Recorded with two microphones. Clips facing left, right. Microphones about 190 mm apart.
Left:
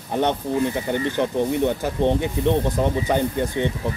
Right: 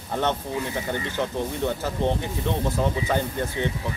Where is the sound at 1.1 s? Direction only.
15° left (ahead or behind).